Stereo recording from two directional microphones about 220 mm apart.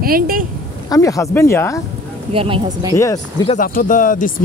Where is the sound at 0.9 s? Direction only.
15° left (ahead or behind).